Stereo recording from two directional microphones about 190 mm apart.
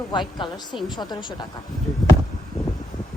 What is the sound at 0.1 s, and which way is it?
Speech, 25° left (ahead or behind).